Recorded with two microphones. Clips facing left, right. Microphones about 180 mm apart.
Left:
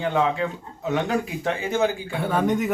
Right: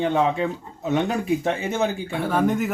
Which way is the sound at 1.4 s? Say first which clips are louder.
Even; 25° right (ahead or behind).